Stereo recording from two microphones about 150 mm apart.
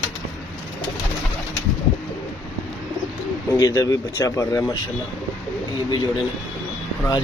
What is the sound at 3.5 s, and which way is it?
Speech, 25° left (ahead or behind).